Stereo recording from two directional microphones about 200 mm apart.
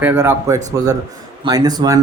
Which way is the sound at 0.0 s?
10° right (ahead or behind).